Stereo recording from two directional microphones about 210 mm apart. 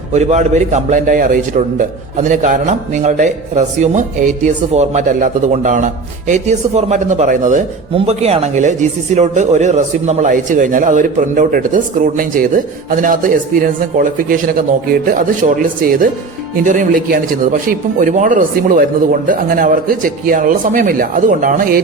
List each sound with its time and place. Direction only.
0.1 s speech: 30° right (ahead or behind)